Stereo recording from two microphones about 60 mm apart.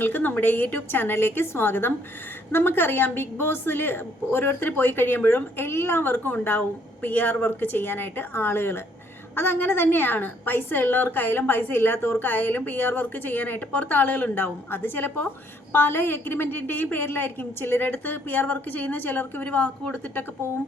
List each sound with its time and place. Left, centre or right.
0.0 s a woman's voice: left